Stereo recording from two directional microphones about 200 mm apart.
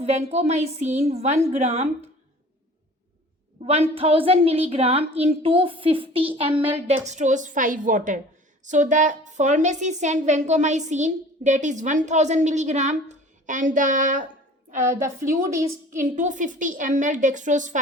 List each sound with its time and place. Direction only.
0.0 s a woman's voice: 35° right (ahead or behind)
3.7 s a woman's voice: 30° right (ahead or behind)